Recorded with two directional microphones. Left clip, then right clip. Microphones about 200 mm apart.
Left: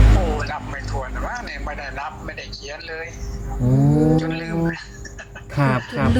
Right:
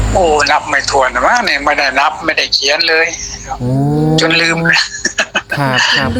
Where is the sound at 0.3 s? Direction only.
40° right (ahead or behind).